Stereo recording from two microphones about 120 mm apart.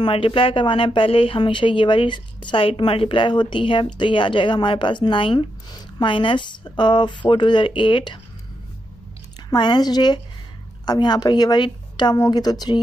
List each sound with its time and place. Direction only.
0.0 s speech: 45° left (ahead or behind)
9.5 s a woman's voice: 35° left (ahead or behind)